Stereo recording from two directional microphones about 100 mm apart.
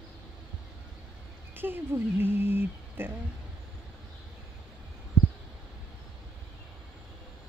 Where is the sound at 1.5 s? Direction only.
20° right (ahead or behind).